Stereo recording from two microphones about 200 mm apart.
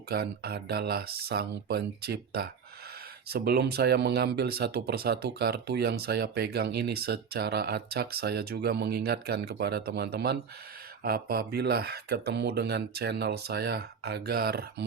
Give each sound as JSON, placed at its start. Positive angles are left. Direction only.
{"t": 0.1, "sound": "speech", "side_deg": -50}